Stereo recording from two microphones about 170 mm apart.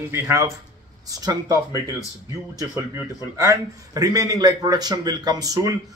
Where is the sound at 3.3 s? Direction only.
15° right (ahead or behind).